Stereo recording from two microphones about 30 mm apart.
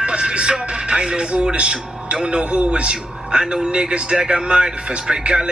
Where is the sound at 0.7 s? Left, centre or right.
Right.